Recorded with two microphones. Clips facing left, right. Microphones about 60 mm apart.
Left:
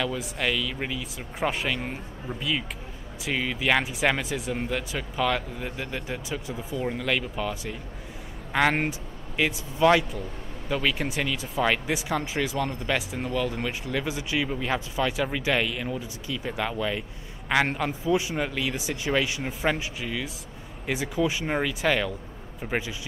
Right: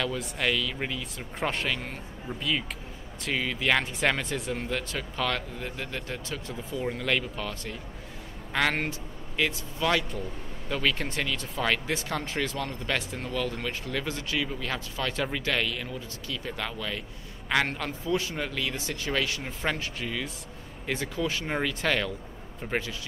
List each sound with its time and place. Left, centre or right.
0.0 s speech: centre
10.7 s speech: centre